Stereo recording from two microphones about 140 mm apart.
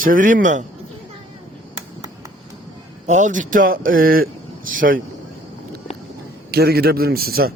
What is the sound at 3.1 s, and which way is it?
Speech, 65° right (ahead or behind).